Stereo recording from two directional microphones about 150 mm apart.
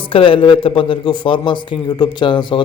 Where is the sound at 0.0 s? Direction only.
35° left (ahead or behind).